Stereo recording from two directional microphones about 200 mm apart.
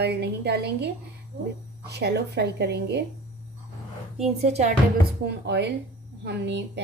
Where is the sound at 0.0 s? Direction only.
55° right (ahead or behind).